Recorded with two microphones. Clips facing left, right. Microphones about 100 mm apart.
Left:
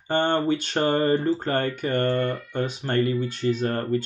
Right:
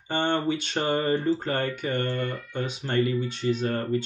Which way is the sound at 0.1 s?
45° left (ahead or behind).